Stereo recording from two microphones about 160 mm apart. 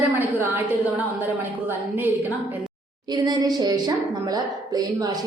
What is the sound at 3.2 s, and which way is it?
A woman's voice, 25° right (ahead or behind).